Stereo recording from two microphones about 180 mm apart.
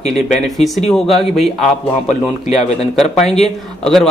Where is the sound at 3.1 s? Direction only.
5° left (ahead or behind).